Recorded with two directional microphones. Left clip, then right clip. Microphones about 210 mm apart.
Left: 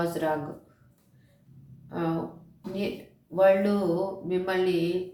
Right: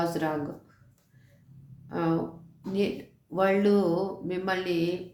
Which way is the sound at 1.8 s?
40° right (ahead or behind).